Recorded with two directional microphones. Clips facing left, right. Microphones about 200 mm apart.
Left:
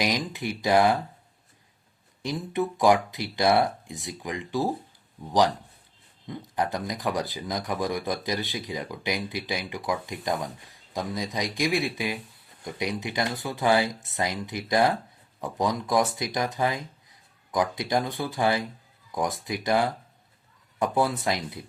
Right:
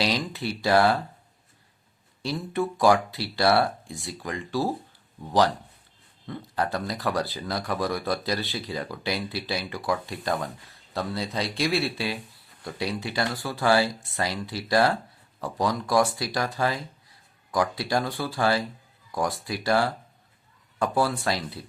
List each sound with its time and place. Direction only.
0.0 s speech: 15° left (ahead or behind)
2.2 s speech: 15° left (ahead or behind)
6.2 s speech: 15° left (ahead or behind)